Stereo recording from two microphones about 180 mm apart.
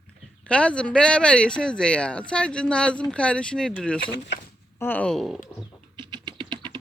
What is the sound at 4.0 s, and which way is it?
Speech, 65° left (ahead or behind).